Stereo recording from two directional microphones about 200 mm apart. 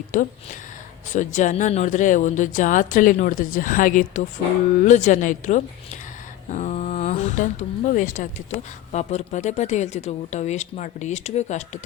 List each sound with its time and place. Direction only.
0.1 s speech: 40° left (ahead or behind)